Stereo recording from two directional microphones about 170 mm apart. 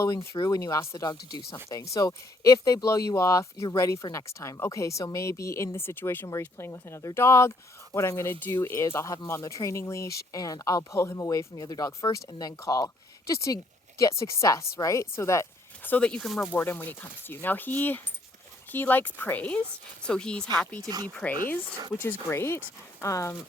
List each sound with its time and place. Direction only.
0.3 s speech: 20° left (ahead or behind); by 16.6 s centre (ahead or behind)
16.6 s a woman's voice: 10° left (ahead or behind)
20.8 s speech: 20° right (ahead or behind)
21.1 s a woman's voice: 5° left (ahead or behind)